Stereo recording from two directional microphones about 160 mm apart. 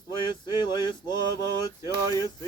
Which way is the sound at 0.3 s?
30° left (ahead or behind).